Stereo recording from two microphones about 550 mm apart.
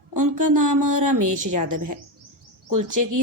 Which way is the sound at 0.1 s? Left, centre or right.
Right.